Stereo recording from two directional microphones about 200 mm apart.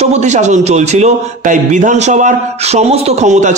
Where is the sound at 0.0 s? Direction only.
35° right (ahead or behind).